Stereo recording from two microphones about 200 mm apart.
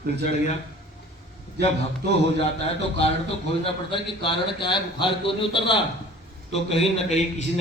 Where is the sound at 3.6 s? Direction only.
25° left (ahead or behind).